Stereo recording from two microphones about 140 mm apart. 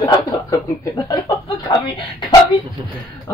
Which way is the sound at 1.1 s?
40° left (ahead or behind).